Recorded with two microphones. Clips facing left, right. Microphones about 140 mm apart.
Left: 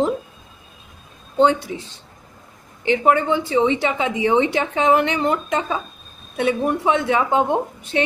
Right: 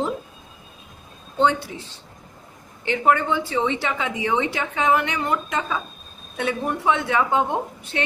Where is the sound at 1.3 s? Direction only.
15° left (ahead or behind).